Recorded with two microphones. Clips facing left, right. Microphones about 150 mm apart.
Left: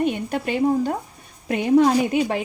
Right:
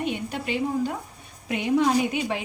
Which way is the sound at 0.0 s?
50° left (ahead or behind).